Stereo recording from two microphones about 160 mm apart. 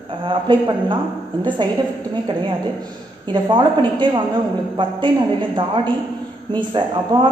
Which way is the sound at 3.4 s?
30° right (ahead or behind).